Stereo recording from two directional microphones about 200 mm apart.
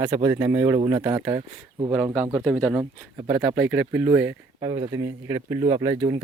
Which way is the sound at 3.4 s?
10° right (ahead or behind).